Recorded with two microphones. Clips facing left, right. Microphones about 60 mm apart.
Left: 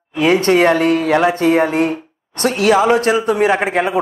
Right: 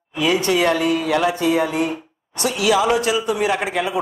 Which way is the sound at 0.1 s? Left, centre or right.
Left.